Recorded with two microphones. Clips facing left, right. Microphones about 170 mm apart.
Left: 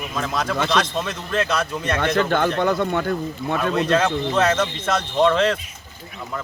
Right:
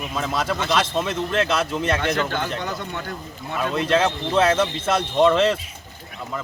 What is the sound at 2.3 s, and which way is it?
Speech, 55° left (ahead or behind).